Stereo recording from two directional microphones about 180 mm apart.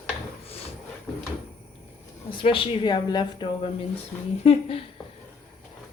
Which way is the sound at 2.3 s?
30° left (ahead or behind).